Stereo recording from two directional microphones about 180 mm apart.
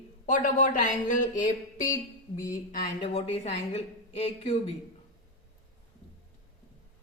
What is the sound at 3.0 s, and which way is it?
A woman's voice, 30° left (ahead or behind).